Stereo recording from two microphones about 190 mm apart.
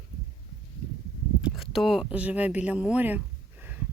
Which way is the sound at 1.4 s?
5° right (ahead or behind).